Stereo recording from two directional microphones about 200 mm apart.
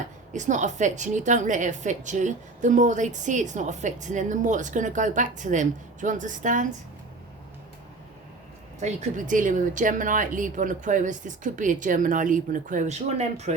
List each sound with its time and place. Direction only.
0.3 s a woman's voice: 40° right (ahead or behind)
8.8 s a woman's voice: 40° right (ahead or behind)